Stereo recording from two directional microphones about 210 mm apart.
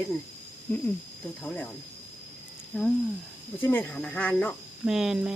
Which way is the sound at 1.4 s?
5° left (ahead or behind).